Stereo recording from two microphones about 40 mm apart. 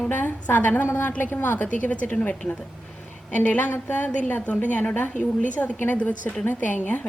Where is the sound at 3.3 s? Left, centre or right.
Left.